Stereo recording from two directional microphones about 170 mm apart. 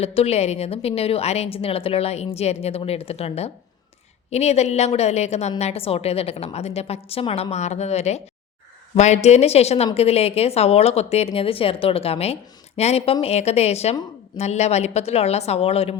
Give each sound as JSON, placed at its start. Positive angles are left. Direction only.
{"t": 0.0, "sound": "a woman's voice", "side_deg": 35}